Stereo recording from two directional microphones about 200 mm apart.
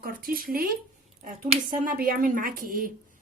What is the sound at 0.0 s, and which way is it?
A woman's voice, 45° right (ahead or behind).